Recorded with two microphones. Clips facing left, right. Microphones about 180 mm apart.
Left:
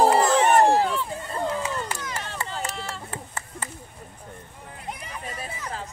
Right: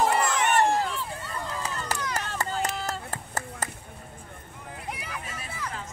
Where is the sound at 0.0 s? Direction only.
35° left (ahead or behind).